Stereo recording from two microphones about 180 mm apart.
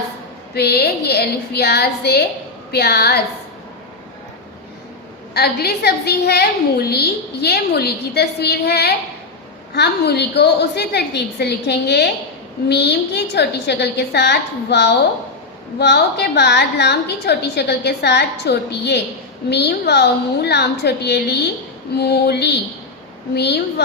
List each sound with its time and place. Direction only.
0.5 s a woman's voice: 65° left (ahead or behind)
5.3 s a woman's voice: 60° left (ahead or behind)